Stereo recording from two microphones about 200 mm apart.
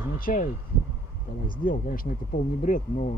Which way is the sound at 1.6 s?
45° left (ahead or behind).